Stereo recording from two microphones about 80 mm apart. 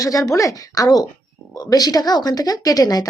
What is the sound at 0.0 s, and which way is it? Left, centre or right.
Speech, left.